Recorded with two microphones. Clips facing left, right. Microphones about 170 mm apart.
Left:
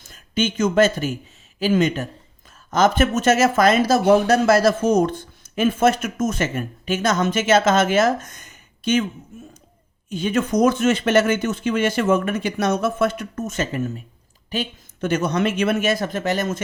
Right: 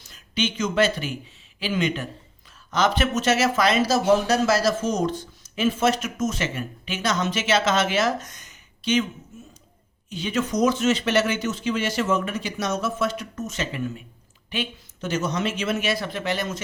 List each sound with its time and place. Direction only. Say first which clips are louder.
0.0 s speech: left 4 dB; 50° left (ahead or behind)
15.0 s speech: left 5 dB; 55° left (ahead or behind)